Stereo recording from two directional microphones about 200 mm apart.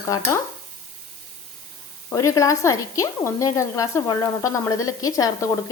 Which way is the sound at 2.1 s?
15° left (ahead or behind).